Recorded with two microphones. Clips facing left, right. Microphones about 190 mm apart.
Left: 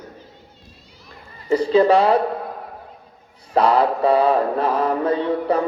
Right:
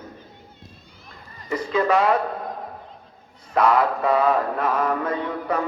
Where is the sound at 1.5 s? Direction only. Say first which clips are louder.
Left 7 dB; 30° left (ahead or behind).